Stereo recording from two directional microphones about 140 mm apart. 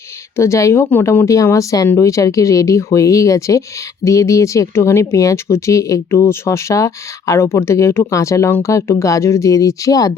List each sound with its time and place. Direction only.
0.3 s speech: 20° left (ahead or behind)